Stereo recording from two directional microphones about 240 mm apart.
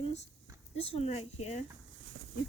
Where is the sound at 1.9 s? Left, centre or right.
Right.